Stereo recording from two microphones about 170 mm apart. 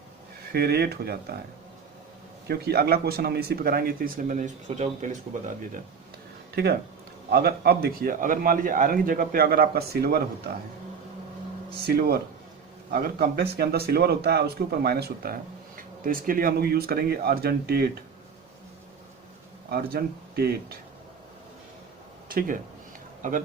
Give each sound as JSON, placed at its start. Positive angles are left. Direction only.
{"t": 0.5, "sound": "speech", "side_deg": -70}
{"t": 2.5, "sound": "a man's voice", "side_deg": -70}
{"t": 6.6, "sound": "a man's voice", "side_deg": -70}
{"t": 11.7, "sound": "a man's voice", "side_deg": -65}
{"t": 19.7, "sound": "a man's voice", "side_deg": -65}
{"t": 22.3, "sound": "a man's voice", "side_deg": -55}